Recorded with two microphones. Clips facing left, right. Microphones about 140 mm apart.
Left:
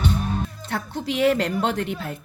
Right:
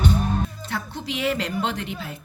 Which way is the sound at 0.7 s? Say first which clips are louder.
Left 3 dB; 50° left (ahead or behind).